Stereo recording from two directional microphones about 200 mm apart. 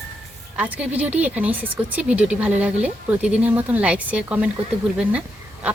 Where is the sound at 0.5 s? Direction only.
5° right (ahead or behind).